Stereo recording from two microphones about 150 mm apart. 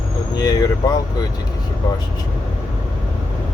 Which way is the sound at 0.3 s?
25° left (ahead or behind).